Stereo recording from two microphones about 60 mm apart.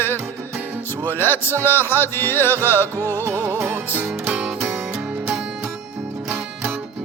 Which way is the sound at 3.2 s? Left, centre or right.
Right.